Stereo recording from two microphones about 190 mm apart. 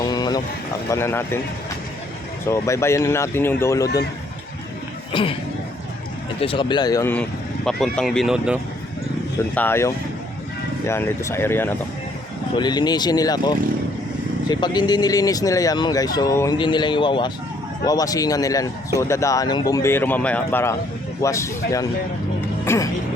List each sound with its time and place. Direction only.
0.0 s clip-clop: 20° left (ahead or behind)
0.9 s speech: 15° left (ahead or behind)
2.5 s speech: 15° left (ahead or behind)
5.1 s speech: 25° left (ahead or behind)
6.4 s speech: 25° left (ahead or behind); by 8.5 s centre (ahead or behind)
9.4 s speech: 10° left (ahead or behind)
12.5 s speech: 20° left (ahead or behind)